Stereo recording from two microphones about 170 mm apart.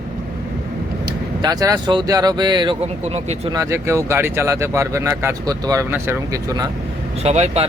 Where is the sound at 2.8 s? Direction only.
40° right (ahead or behind).